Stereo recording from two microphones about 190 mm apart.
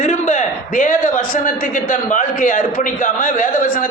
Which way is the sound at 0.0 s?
40° left (ahead or behind).